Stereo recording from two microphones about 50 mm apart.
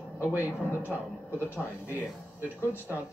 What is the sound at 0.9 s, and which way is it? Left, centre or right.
Speech, left.